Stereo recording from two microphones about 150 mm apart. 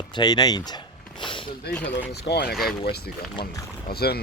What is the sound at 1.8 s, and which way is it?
Speech, 90° left.